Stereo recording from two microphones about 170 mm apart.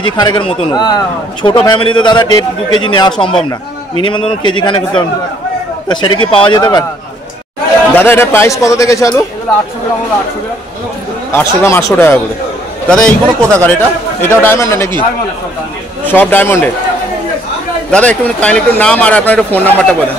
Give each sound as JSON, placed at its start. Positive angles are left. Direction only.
{"t": 0.0, "sound": "a man's voice", "side_deg": 25}
{"t": 7.9, "sound": "speech", "side_deg": 10}
{"t": 11.3, "sound": "speech", "side_deg": 15}
{"t": 16.1, "sound": "speech", "side_deg": 10}
{"t": 17.9, "sound": "speech", "side_deg": 5}